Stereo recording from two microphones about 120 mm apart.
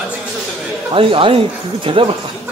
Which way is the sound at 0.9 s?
45° right (ahead or behind).